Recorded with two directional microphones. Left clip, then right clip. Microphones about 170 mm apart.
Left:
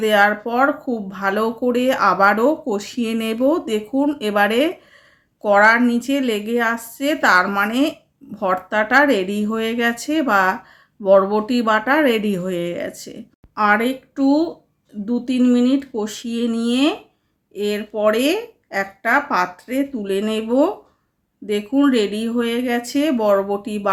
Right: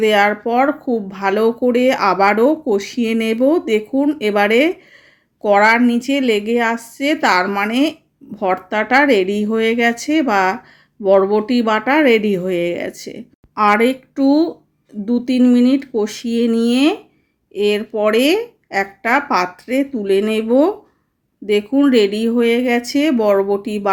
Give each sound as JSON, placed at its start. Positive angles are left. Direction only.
{"t": 0.0, "sound": "speech", "side_deg": -15}